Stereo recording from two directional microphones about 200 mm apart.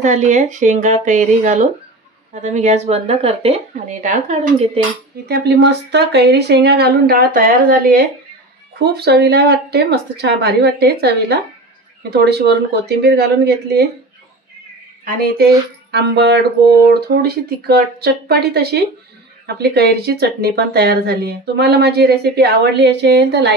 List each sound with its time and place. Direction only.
0.0 s speech: 35° right (ahead or behind)
5.3 s speech: 60° right (ahead or behind)
15.0 s speech: 50° right (ahead or behind)